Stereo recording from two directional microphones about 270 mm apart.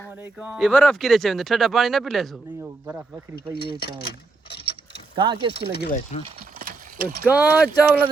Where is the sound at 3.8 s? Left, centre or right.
Left.